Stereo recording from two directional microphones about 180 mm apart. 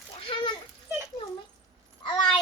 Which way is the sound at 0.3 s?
30° left (ahead or behind).